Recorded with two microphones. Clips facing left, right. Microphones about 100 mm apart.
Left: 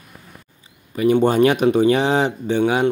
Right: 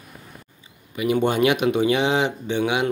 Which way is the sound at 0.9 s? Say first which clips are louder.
Left 5 dB; 35° left (ahead or behind).